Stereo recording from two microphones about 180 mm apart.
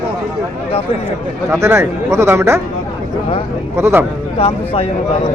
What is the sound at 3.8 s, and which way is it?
Speech, 15° right (ahead or behind).